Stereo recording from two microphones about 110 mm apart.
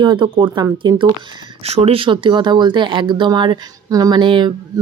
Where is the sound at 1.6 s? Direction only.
70° right (ahead or behind); by 3.6 s 45° right (ahead or behind).